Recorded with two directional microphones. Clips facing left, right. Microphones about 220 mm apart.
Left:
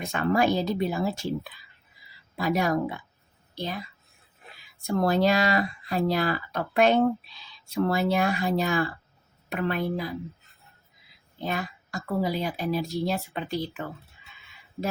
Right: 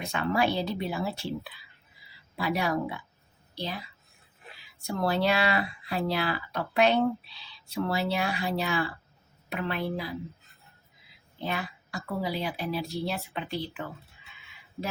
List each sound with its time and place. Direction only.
0.0 s speech: 50° left (ahead or behind)
4.9 s speech: 45° left (ahead or behind)
11.4 s speech: 45° left (ahead or behind)